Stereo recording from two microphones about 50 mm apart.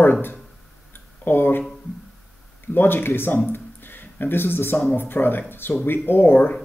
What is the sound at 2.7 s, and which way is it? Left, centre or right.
Speech, left.